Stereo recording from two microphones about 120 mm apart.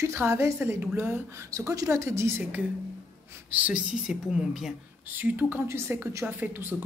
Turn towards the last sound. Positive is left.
turn(degrees=-15)  # may be behind; listen again after turning